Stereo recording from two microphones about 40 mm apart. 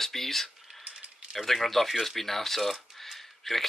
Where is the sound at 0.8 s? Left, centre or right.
Centre.